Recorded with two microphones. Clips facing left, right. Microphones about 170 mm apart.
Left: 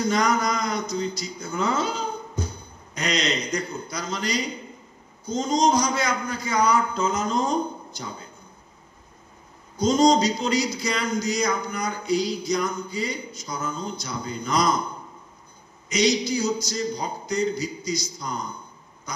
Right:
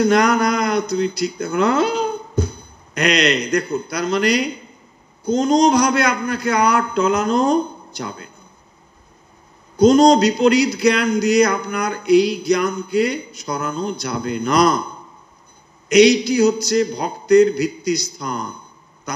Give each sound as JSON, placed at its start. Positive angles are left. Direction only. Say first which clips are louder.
{"t": 0.0, "sound": "speech", "louder": "right 7 dB", "side_deg": -70}
{"t": 9.8, "sound": "speech", "louder": "right 7 dB", "side_deg": -65}
{"t": 15.9, "sound": "speech", "louder": "right 10 dB", "side_deg": -65}
{"t": 19.1, "sound": "duck", "louder": "right 7 dB", "side_deg": -65}